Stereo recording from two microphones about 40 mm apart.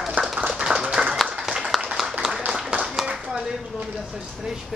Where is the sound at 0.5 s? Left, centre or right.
Centre.